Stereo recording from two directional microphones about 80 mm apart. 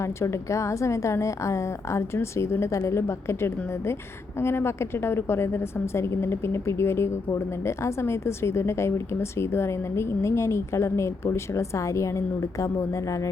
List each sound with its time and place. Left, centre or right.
0.0 s a woman's voice: left